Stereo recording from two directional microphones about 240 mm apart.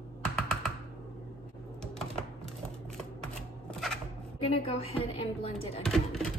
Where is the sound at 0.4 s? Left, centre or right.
Centre.